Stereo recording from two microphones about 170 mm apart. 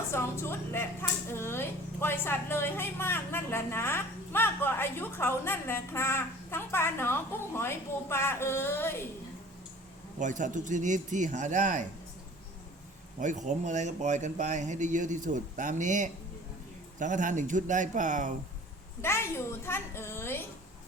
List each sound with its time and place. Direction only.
0.1 s a woman's voice: 15° left (ahead or behind)
10.2 s speech: 45° right (ahead or behind)
13.1 s speech: 45° right (ahead or behind)
19.0 s a woman's voice: 15° left (ahead or behind)